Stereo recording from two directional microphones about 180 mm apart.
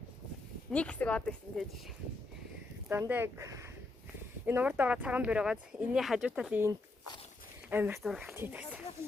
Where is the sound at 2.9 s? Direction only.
10° right (ahead or behind).